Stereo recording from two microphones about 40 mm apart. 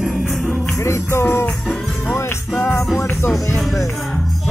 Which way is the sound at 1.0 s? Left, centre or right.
Left.